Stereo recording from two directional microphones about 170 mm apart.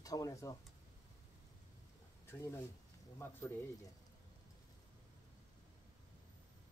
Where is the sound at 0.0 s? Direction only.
20° left (ahead or behind).